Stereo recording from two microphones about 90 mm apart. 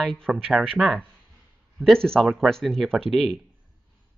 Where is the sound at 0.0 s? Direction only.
5° left (ahead or behind).